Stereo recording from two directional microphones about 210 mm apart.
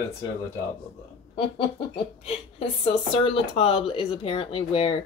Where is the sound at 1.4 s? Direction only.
25° left (ahead or behind).